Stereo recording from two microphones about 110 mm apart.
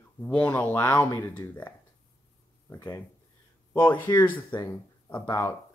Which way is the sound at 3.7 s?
15° left (ahead or behind).